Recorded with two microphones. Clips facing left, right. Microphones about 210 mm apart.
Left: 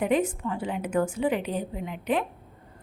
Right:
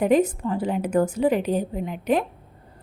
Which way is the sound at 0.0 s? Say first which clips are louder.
Right 5 dB; 40° right (ahead or behind).